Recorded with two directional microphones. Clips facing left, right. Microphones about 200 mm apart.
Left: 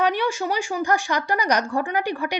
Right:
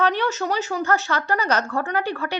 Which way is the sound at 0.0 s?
10° left (ahead or behind).